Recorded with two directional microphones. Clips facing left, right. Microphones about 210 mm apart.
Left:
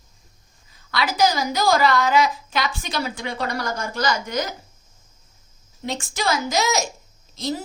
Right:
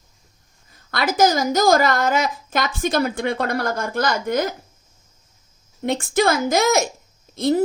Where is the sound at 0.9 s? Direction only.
50° right (ahead or behind).